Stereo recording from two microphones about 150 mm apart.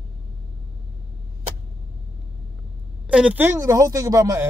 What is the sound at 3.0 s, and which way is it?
Speech, 5° right (ahead or behind).